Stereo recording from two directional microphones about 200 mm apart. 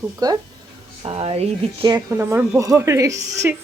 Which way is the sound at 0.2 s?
20° right (ahead or behind).